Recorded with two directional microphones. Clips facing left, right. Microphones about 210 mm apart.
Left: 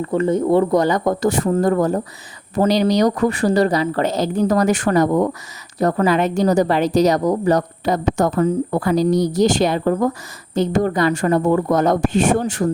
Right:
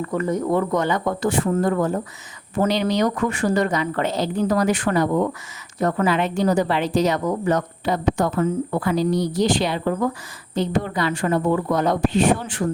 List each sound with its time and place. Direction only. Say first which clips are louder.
0.0 s a woman's voice: left 5 dB; 30° left (ahead or behind)